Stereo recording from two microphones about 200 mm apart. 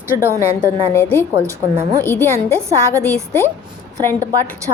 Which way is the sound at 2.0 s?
10° left (ahead or behind).